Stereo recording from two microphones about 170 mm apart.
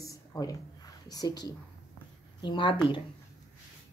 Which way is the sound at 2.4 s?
30° left (ahead or behind).